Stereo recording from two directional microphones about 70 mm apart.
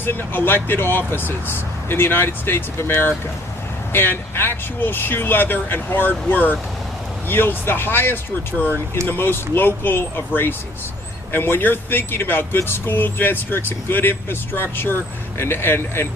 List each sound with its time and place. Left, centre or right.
0.0 s speech: left